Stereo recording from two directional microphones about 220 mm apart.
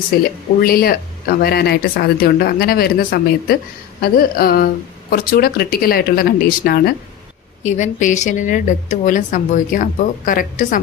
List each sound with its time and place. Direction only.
0.2 s speech: 40° left (ahead or behind)
7.6 s a woman's voice: 35° left (ahead or behind)